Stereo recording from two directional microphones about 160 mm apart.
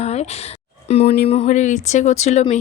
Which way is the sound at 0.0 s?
40° left (ahead or behind).